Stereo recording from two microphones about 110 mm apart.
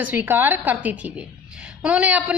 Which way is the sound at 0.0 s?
15° right (ahead or behind).